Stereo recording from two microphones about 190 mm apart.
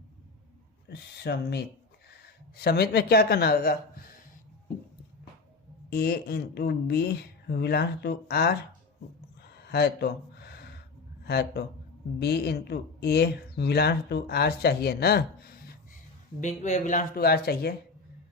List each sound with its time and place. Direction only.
0.9 s speech: 60° left (ahead or behind)
5.9 s speech: 55° left (ahead or behind)
9.7 s a sound: 55° left (ahead or behind)
11.2 s speech: 60° left (ahead or behind)
16.4 s speech: 40° left (ahead or behind); by 17.7 s 55° left (ahead or behind)